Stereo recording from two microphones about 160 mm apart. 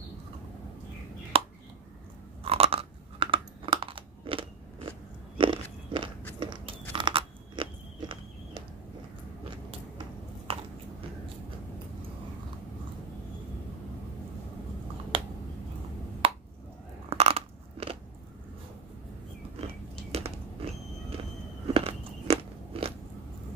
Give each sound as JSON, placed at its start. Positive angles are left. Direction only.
{"t": 1.3, "sound": "finger snapping", "side_deg": -35}
{"t": 2.4, "sound": "chewing", "side_deg": -35}
{"t": 5.4, "sound": "biting", "side_deg": -30}
{"t": 9.7, "sound": "a sound", "side_deg": -35}
{"t": 16.2, "sound": "a sound", "side_deg": -35}
{"t": 17.1, "sound": "biting", "side_deg": -40}
{"t": 19.6, "sound": "biting", "side_deg": -40}